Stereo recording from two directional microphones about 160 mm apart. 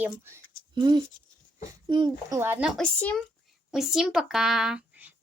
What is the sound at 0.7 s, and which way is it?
A child's voice, 30° right (ahead or behind).